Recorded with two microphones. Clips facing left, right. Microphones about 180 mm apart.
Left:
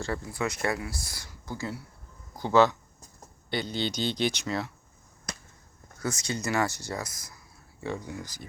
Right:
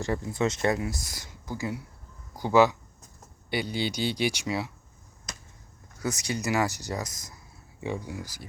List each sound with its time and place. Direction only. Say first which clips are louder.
0.0 s speech: right 4 dB; 20° right (ahead or behind)
6.0 s speech: right 1 dB; 15° right (ahead or behind)